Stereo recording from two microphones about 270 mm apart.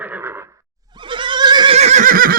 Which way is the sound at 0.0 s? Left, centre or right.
Centre.